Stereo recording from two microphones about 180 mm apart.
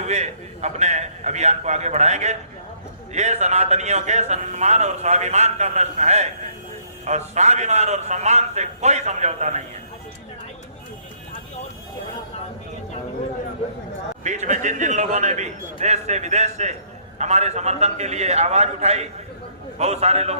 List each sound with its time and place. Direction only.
0.0 s a man's voice: 40° right (ahead or behind)
14.3 s a man's voice: 40° right (ahead or behind)